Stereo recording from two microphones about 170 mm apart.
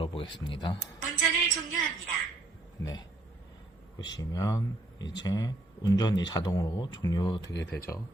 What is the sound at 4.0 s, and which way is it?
Speech, 20° left (ahead or behind).